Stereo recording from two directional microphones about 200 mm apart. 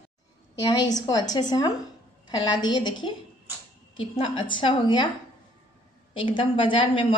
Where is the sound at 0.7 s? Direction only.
20° left (ahead or behind).